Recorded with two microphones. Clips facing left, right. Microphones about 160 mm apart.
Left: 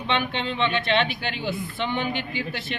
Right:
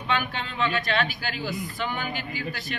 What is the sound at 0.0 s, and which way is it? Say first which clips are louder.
Speech: left 3 dB; 25° left (ahead or behind).